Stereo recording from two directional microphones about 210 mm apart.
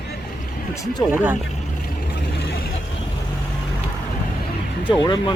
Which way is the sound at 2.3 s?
50° left (ahead or behind).